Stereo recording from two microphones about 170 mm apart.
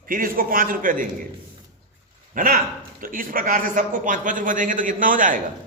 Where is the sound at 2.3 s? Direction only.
55° right (ahead or behind).